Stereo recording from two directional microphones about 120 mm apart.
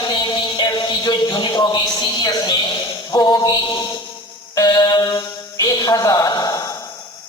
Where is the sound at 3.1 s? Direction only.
35° left (ahead or behind).